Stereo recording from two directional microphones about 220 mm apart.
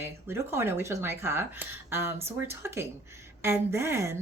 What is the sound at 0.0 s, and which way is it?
A woman's voice, 10° right (ahead or behind).